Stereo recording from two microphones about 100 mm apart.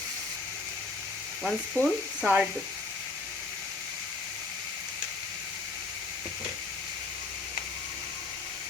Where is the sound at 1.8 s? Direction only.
20° left (ahead or behind).